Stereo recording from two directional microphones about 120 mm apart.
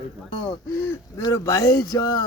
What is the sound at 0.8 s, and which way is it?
Speech, 30° left (ahead or behind).